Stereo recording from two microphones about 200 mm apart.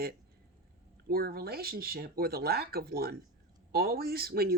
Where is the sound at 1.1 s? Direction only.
50° right (ahead or behind).